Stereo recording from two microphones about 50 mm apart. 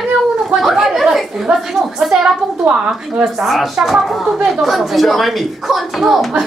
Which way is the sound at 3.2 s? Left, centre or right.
Centre.